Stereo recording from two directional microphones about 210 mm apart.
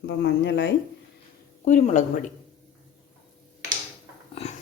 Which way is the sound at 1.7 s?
35° left (ahead or behind).